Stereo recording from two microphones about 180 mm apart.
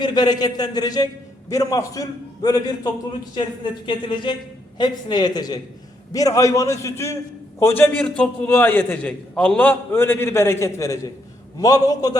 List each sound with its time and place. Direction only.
0.0 s a man's voice: 25° left (ahead or behind)